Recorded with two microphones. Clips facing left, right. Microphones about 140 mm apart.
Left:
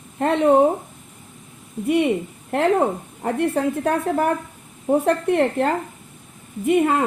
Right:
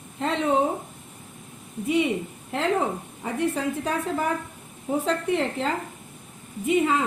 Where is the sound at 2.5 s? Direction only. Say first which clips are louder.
Left 6 dB; 55° left (ahead or behind).